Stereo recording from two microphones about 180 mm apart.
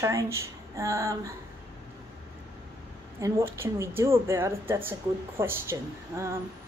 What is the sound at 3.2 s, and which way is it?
A woman's voice, 15° right (ahead or behind).